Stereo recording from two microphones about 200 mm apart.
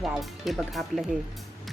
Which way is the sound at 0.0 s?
Centre (ahead or behind).